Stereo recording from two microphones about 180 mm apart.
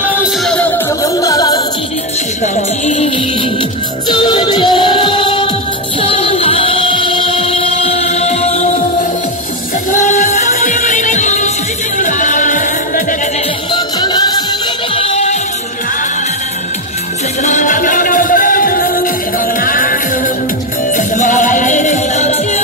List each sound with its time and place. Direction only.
0.2 s music: 5° left (ahead or behind)
2.4 s music: 40° left (ahead or behind)
4.1 s music: 25° left (ahead or behind)
9.8 s music: 45° left (ahead or behind)
13.7 s music: 25° left (ahead or behind)
15.0 s music: 35° left (ahead or behind)
17.4 s music: 45° left (ahead or behind)